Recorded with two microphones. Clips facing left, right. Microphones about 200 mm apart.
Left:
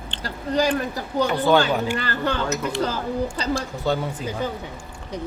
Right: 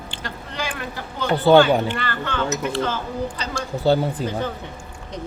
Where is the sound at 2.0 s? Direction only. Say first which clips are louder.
Left 1 dB; 40° left (ahead or behind).